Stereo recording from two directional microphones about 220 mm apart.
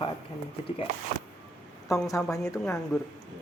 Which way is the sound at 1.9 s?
15° left (ahead or behind).